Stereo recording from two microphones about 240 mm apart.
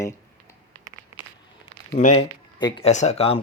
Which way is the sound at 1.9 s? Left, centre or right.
Left.